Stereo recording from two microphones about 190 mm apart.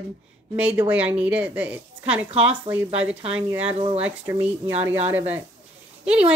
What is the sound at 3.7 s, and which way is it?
Speech, 35° right (ahead or behind).